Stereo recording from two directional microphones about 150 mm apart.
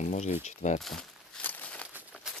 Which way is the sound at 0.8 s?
Centre (ahead or behind).